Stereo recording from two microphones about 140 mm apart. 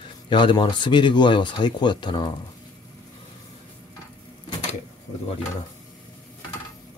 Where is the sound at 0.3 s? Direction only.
35° left (ahead or behind).